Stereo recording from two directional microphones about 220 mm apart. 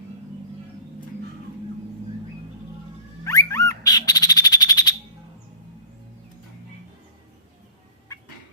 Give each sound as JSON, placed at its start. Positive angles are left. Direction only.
{"t": 3.2, "sound": "bird", "side_deg": 15}